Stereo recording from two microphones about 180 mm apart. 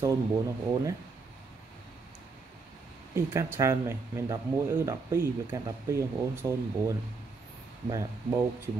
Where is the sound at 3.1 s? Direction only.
15° right (ahead or behind).